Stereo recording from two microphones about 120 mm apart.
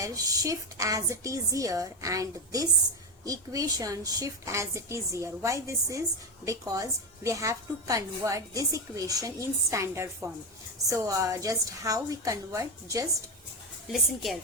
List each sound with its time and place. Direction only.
0.0 s a woman's voice: 30° right (ahead or behind)
13.9 s a woman's voice: centre (ahead or behind)